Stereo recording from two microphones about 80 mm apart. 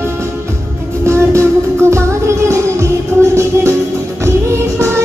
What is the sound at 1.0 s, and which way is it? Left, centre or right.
Music, right.